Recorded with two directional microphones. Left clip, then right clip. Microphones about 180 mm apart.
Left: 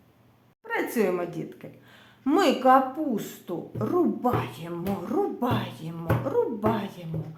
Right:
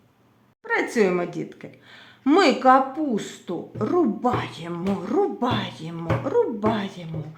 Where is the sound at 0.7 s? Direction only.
40° right (ahead or behind).